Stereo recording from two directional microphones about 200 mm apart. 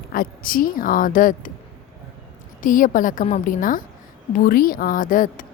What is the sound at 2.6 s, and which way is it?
A woman's voice, 40° left (ahead or behind).